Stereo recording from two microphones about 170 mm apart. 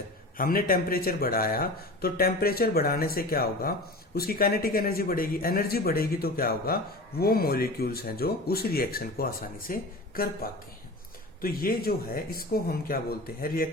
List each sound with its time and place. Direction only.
0.3 s speech: 60° left (ahead or behind)
11.3 s speech: 60° left (ahead or behind)